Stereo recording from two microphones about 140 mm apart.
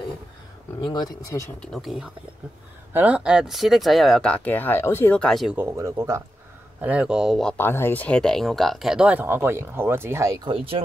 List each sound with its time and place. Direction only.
0.7 s speech: 30° left (ahead or behind)
1.6 s speech: centre (ahead or behind); by 5.2 s 20° left (ahead or behind)
5.2 s speech: centre (ahead or behind)
5.6 s speech: 20° right (ahead or behind)
6.8 s speech: 10° right (ahead or behind)
7.5 s speech: 15° left (ahead or behind); by 10.3 s 20° right (ahead or behind)
10.4 s speech: 40° right (ahead or behind)